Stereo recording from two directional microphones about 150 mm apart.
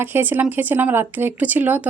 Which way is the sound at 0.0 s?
15° right (ahead or behind).